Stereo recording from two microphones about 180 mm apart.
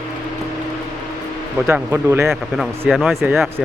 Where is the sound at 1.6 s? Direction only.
15° right (ahead or behind).